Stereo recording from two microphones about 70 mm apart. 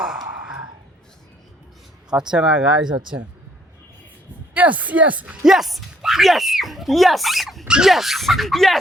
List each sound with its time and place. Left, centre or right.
0.0 s sigh: centre
2.1 s speech: centre
4.5 s speech: right; by 8.8 s centre